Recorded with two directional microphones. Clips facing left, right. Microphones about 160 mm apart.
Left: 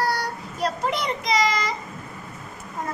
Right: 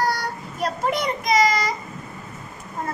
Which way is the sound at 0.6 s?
50° right (ahead or behind).